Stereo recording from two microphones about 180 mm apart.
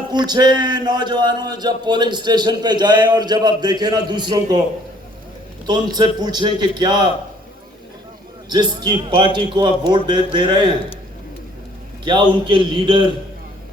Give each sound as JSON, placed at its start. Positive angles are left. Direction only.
{"t": 0.1, "sound": "speech", "side_deg": -25}
{"t": 5.6, "sound": "speech", "side_deg": -25}
{"t": 8.5, "sound": "speech", "side_deg": -25}
{"t": 12.0, "sound": "speech", "side_deg": -25}